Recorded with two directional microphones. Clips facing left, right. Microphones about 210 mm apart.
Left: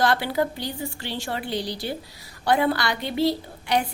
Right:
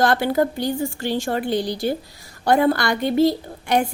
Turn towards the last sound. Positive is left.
turn(degrees=-50)  # may be behind; listen again after turning